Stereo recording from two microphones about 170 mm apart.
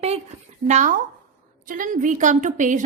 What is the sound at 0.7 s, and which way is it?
A woman's voice, 45° right (ahead or behind).